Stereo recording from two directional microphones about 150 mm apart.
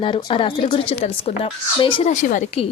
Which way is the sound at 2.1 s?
55° left (ahead or behind).